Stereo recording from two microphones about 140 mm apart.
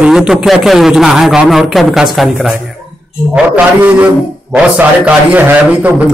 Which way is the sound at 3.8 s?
10° right (ahead or behind).